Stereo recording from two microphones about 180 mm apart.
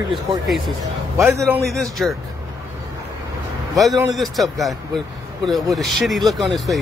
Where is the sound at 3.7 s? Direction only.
Centre (ahead or behind).